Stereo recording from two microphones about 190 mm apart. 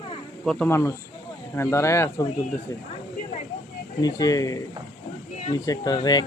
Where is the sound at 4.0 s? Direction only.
20° left (ahead or behind).